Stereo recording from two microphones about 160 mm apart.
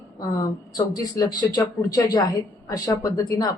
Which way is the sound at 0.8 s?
25° left (ahead or behind).